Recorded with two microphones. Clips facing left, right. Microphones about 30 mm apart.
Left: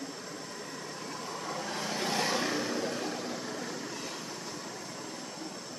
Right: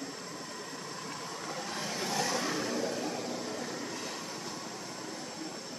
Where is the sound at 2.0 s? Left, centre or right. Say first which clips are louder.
Left 2 dB; left.